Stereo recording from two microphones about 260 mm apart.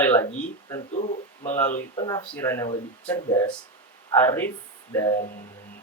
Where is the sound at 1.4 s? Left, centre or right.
Centre.